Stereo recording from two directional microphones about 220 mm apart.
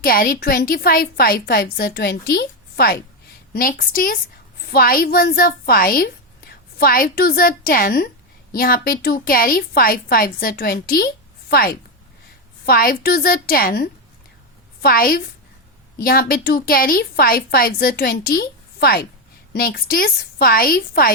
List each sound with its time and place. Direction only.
0.0 s a woman's voice: 40° left (ahead or behind)